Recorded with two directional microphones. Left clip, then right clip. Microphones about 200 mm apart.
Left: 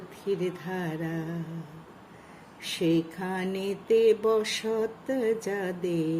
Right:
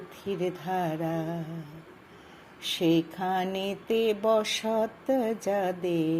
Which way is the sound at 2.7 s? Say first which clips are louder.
Right 1 dB; 15° right (ahead or behind).